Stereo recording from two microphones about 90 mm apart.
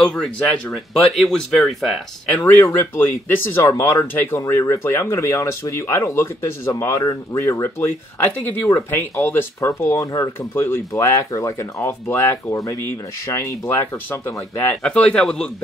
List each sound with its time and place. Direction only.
0.0 s speech: 5° left (ahead or behind)
2.6 s speech: 30° left (ahead or behind)
12.1 s speech: 25° left (ahead or behind)
13.3 s speech: 35° left (ahead or behind)
14.1 s speech: 25° left (ahead or behind)
14.8 s speech: 10° left (ahead or behind)